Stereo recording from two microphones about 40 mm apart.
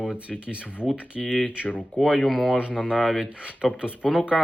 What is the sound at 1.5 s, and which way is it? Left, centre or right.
Speech, right.